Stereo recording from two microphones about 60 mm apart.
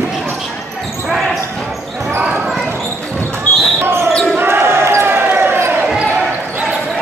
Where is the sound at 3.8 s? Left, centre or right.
Right.